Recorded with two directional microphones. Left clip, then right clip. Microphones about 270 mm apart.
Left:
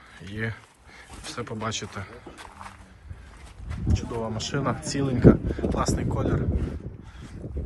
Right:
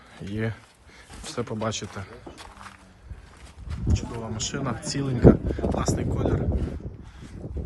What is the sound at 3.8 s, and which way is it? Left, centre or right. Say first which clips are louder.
Speech: left 3 dB; centre.